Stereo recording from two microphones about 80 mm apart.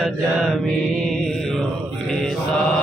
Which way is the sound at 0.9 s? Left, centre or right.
Centre.